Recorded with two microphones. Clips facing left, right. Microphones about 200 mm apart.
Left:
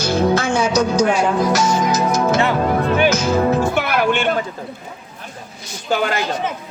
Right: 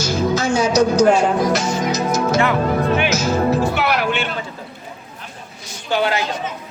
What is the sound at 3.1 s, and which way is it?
Music, 55° left (ahead or behind).